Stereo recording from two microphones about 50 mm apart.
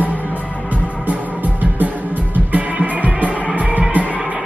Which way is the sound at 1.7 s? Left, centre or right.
Right.